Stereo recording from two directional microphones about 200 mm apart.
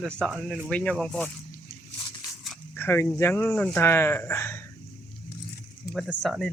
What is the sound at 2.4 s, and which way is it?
Speech, 10° left (ahead or behind).